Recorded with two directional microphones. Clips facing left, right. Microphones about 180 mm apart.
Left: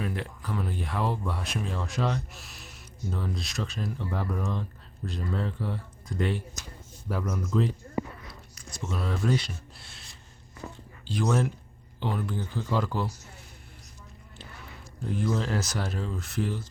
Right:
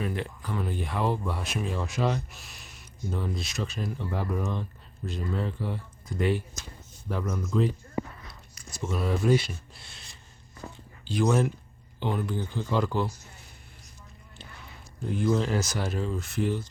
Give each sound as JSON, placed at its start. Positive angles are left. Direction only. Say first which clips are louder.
{"t": 0.0, "sound": "speech", "louder": "right 1 dB", "side_deg": 0}
{"t": 7.1, "sound": "speech", "louder": "even", "side_deg": 5}
{"t": 8.3, "sound": "a sound", "louder": "left 2 dB", "side_deg": -5}
{"t": 11.0, "sound": "speech", "louder": "right 2 dB", "side_deg": 0}
{"t": 15.2, "sound": "speech", "louder": "right 3 dB", "side_deg": 0}